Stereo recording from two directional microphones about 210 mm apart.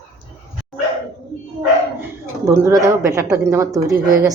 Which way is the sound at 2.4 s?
10° right (ahead or behind).